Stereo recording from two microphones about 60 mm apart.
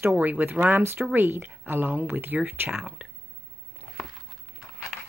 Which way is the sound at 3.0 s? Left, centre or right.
Right.